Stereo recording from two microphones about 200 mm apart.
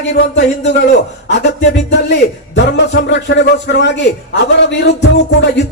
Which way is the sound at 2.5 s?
60° left (ahead or behind).